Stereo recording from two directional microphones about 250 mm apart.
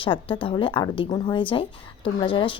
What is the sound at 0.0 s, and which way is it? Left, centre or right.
Speech, centre.